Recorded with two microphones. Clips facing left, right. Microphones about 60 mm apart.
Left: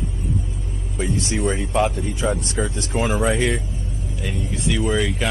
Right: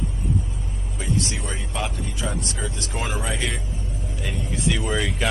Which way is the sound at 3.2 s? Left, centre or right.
Centre.